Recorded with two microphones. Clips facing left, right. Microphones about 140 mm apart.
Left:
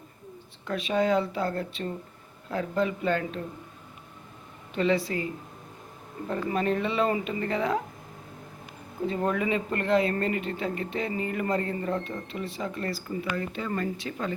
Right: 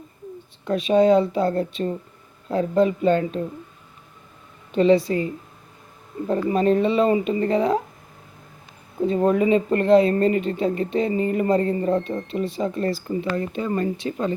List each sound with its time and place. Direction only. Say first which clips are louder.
0.6 s speech: right 9 dB; 25° right (ahead or behind)
4.7 s speech: right 9 dB; 25° right (ahead or behind)
9.0 s speech: right 8 dB; 25° right (ahead or behind)